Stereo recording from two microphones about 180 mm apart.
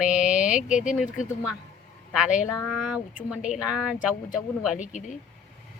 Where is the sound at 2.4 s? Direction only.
20° left (ahead or behind).